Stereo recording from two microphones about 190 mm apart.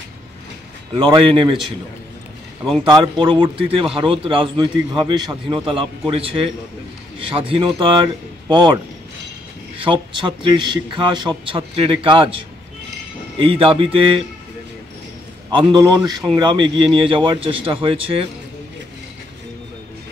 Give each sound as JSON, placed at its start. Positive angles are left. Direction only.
{"t": 0.9, "sound": "speech", "side_deg": -25}
{"t": 2.8, "sound": "speech", "side_deg": -25}
{"t": 9.8, "sound": "speech", "side_deg": -25}
{"t": 13.4, "sound": "speech", "side_deg": -30}
{"t": 15.5, "sound": "speech", "side_deg": -20}